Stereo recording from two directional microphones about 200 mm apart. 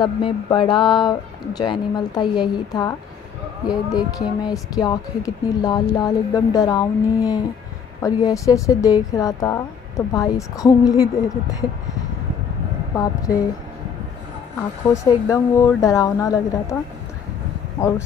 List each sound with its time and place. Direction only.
0.0 s speech: 25° left (ahead or behind)
12.9 s speech: 20° left (ahead or behind)
14.9 s speech: 15° left (ahead or behind)
17.7 s speech: 15° left (ahead or behind)